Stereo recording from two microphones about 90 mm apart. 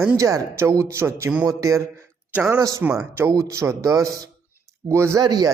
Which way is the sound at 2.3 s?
15° right (ahead or behind).